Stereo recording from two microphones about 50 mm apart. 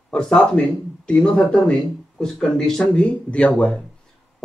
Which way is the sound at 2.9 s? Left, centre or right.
Left.